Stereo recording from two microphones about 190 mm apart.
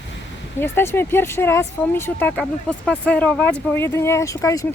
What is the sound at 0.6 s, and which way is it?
Speech, 10° left (ahead or behind).